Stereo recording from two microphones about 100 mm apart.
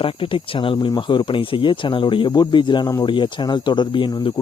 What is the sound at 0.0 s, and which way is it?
Speech, 60° left (ahead or behind).